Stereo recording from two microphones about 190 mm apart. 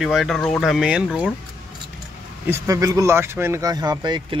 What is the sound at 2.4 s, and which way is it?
Speech, 15° right (ahead or behind).